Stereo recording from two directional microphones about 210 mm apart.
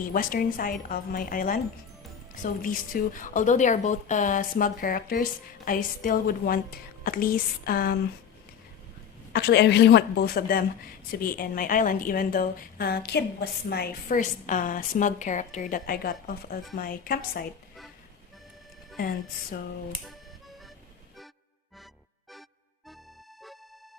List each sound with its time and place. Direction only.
0.1 s a woman's voice: 40° left (ahead or behind)
9.3 s a woman's voice: 50° left (ahead or behind)
18.9 s a woman's voice: 40° left (ahead or behind)